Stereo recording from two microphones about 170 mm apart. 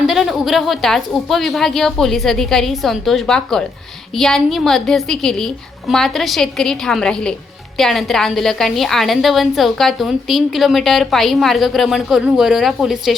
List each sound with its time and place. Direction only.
0.1 s a woman's voice: centre (ahead or behind)